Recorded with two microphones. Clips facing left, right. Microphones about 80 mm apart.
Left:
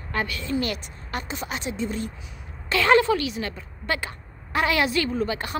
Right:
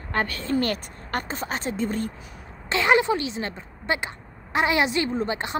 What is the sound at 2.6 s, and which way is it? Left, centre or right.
A woman's voice, right.